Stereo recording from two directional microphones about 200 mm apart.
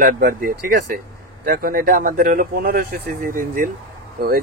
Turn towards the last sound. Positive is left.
turn(degrees=-50)  # may be behind; listen again after turning